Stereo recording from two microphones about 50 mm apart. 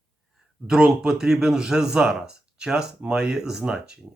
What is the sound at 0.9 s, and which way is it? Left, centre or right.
Speech, centre.